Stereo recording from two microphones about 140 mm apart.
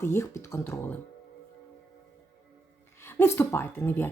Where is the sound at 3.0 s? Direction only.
15° left (ahead or behind).